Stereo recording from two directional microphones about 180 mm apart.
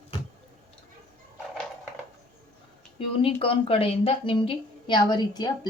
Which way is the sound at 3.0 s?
30° left (ahead or behind).